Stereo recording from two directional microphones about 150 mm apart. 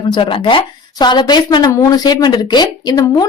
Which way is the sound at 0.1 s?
35° left (ahead or behind).